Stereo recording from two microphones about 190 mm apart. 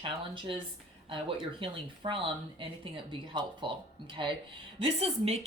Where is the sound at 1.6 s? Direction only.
25° right (ahead or behind).